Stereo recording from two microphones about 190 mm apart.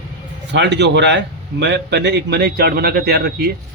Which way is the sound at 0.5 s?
65° right (ahead or behind).